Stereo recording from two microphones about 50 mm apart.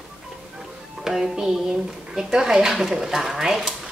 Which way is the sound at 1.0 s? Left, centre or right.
Centre.